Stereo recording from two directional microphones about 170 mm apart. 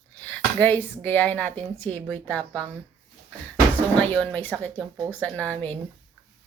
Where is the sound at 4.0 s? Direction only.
10° left (ahead or behind).